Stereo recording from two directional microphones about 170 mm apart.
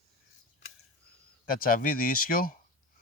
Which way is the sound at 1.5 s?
55° left (ahead or behind).